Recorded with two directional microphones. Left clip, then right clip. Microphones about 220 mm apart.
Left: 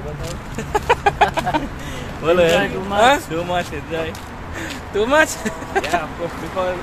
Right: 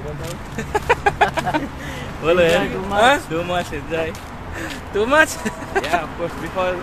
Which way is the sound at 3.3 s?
15° right (ahead or behind).